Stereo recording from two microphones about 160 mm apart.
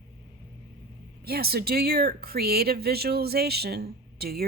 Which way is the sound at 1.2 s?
75° right (ahead or behind).